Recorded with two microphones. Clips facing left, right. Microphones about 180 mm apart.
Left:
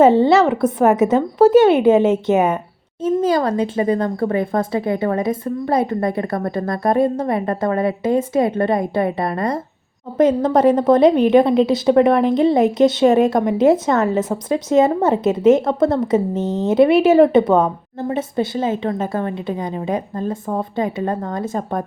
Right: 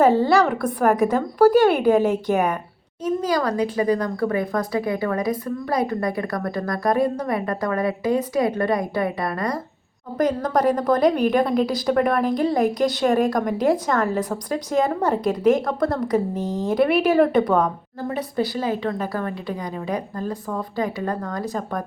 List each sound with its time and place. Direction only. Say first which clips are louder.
0.0 s a woman's voice: left 5 dB; 25° left (ahead or behind)